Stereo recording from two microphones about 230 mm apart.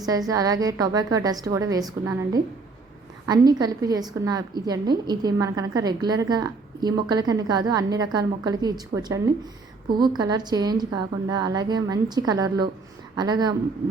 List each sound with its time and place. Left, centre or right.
0.0 s a woman's voice: centre